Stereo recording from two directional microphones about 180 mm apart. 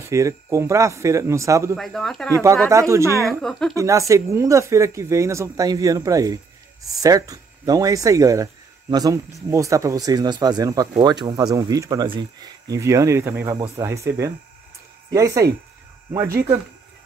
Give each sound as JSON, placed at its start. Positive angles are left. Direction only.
{"t": 0.0, "sound": "speech", "side_deg": -15}
{"t": 1.8, "sound": "speech", "side_deg": 0}
{"t": 2.7, "sound": "speech", "side_deg": -15}
{"t": 3.3, "sound": "speech", "side_deg": 0}
{"t": 3.7, "sound": "speech", "side_deg": -15}